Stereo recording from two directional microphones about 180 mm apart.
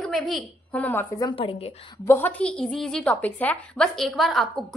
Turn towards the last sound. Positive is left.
turn(degrees=0)  # may be behind; listen again after turning